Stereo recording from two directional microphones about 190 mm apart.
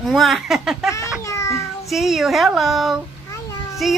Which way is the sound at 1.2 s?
15° left (ahead or behind).